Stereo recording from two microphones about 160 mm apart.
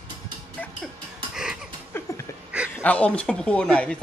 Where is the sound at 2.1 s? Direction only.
20° left (ahead or behind).